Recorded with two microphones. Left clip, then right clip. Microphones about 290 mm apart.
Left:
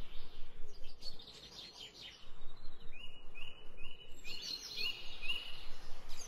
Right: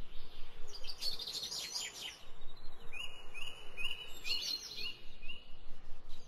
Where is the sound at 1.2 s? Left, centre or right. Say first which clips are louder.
Right 11 dB; right.